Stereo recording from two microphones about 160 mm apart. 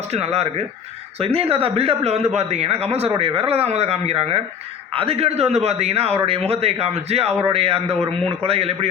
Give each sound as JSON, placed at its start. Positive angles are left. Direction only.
{"t": 0.1, "sound": "a man's voice", "side_deg": -40}